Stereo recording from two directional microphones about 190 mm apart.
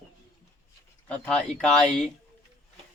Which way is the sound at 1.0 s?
5° left (ahead or behind).